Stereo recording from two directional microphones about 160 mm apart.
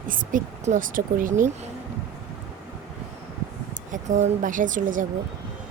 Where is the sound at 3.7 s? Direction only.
50° right (ahead or behind).